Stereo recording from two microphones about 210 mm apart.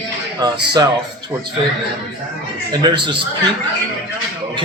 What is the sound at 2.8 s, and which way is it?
Speech, 20° right (ahead or behind).